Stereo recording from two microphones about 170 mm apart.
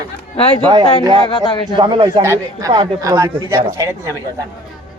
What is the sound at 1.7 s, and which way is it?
Speech, 30° right (ahead or behind).